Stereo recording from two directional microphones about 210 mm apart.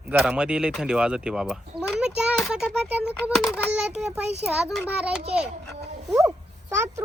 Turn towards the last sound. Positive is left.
turn(degrees=-10)  # may be behind; listen again after turning